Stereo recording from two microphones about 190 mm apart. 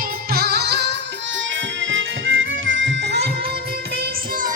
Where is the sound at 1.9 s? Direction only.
85° right; by 3.3 s 70° right (ahead or behind).